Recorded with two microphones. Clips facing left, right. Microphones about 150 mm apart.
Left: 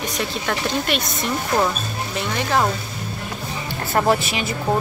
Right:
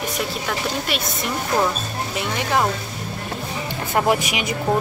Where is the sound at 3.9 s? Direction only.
15° right (ahead or behind).